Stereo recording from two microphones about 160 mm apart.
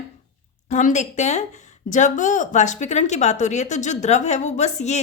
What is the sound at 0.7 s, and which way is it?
Speech, 50° left (ahead or behind).